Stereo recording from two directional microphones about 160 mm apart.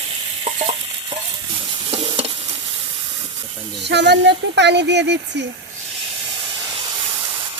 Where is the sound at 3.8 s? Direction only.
90° right.